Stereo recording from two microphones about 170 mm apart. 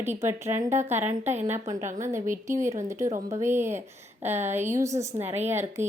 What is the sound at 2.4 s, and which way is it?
A woman's voice, 15° right (ahead or behind).